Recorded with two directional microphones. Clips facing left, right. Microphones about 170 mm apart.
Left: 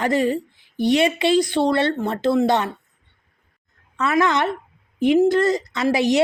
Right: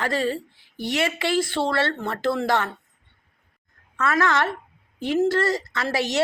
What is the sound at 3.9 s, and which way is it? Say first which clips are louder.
Speech: left 3 dB; 20° left (ahead or behind).